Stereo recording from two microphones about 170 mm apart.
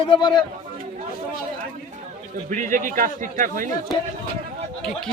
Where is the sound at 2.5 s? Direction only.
50° right (ahead or behind).